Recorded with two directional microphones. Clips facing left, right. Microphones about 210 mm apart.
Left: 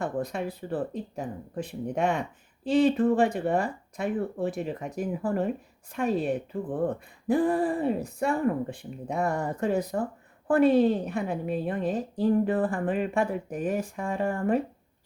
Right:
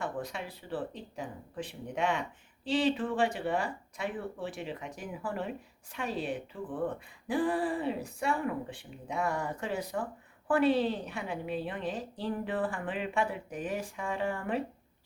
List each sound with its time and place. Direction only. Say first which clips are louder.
0.0 s speech: left 7 dB; 45° left (ahead or behind)